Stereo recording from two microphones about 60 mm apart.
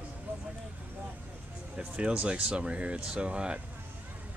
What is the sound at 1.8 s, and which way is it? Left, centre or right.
Speech, right.